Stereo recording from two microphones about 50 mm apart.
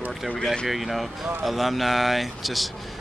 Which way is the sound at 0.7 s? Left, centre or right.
Centre.